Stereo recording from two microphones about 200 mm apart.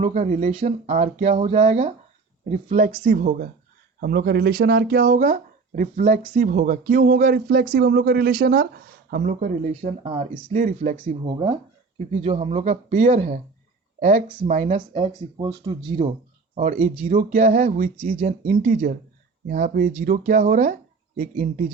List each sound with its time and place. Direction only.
0.0 s speech: 35° right (ahead or behind)
10.0 s speech: 25° right (ahead or behind)
10.5 s speech: 40° right (ahead or behind)
11.0 s speech: 25° right (ahead or behind); by 14.3 s 45° right (ahead or behind)
14.3 s speech: 25° right (ahead or behind)
14.5 s speech: 40° right (ahead or behind)
14.8 s speech: 20° right (ahead or behind)
16.6 s speech: 40° right (ahead or behind)